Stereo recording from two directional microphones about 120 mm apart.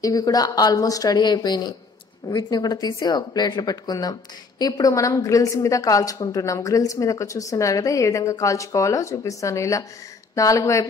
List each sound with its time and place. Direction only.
0.0 s speech: 30° left (ahead or behind)